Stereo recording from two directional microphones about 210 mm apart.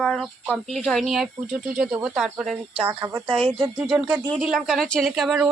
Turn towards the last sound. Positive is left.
turn(degrees=0)  # may be behind; listen again after turning